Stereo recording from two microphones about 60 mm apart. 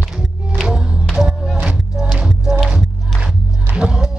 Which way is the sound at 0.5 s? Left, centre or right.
Centre.